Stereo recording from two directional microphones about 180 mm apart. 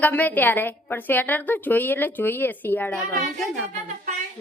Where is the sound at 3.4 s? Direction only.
Centre (ahead or behind).